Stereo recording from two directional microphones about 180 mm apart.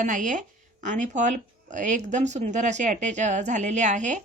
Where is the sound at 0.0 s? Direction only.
45° right (ahead or behind).